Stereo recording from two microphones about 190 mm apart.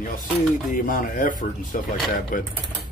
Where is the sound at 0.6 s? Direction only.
45° left (ahead or behind).